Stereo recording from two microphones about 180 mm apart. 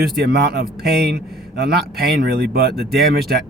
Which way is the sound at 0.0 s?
60° right (ahead or behind).